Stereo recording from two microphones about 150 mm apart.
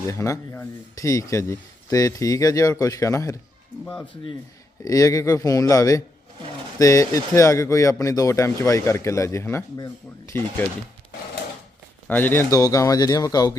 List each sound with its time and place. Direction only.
0.1 s speech: 20° left (ahead or behind)
4.8 s speech: 25° left (ahead or behind)
12.0 s speech: 15° left (ahead or behind)